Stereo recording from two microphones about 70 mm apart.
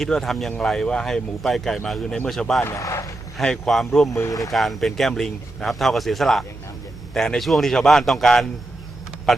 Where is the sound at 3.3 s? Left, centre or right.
Centre.